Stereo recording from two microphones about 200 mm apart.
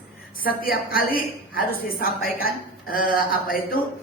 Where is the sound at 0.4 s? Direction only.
45° left (ahead or behind).